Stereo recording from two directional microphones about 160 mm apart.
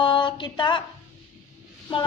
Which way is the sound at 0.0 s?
30° left (ahead or behind).